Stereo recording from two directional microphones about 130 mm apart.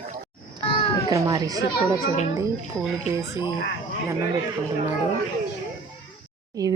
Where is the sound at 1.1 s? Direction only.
25° right (ahead or behind).